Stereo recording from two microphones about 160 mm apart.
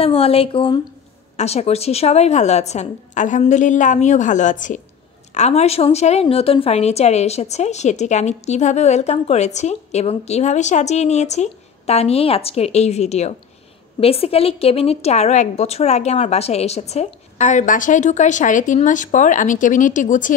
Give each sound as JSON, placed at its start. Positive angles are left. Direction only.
{"t": 0.0, "sound": "a woman's voice", "side_deg": 35}